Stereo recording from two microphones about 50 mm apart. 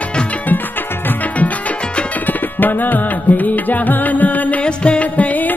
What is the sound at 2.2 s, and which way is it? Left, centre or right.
Music, left.